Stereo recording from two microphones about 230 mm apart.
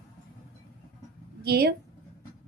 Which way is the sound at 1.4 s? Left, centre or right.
Right.